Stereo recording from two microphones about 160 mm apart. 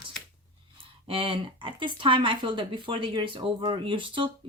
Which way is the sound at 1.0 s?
35° right (ahead or behind).